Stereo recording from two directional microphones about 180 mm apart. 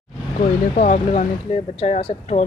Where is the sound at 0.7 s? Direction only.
40° left (ahead or behind).